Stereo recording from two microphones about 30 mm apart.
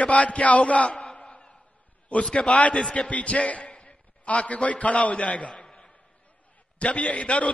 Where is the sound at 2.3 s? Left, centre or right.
Left.